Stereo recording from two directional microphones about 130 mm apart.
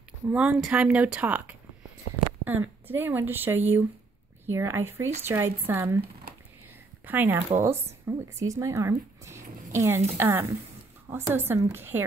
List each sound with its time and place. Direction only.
0.3 s a woman's voice: 10° right (ahead or behind)
7.1 s a woman's voice: 15° right (ahead or behind)